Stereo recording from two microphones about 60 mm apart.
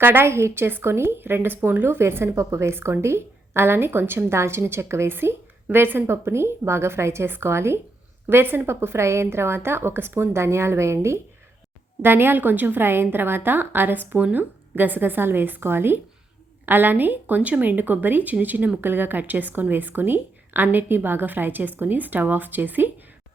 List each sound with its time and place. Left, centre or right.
0.0 s speech: right
2.3 s a woman's voice: right
12.0 s speech: right